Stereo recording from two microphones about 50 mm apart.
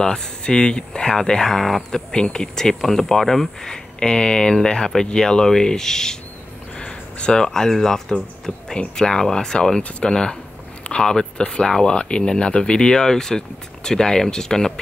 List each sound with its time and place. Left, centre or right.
0.0 s speech: centre